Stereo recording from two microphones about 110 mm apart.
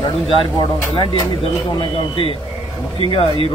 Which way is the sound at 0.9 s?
50° left (ahead or behind).